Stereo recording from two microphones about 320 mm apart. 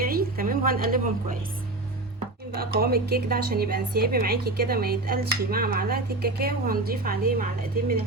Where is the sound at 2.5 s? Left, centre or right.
Right.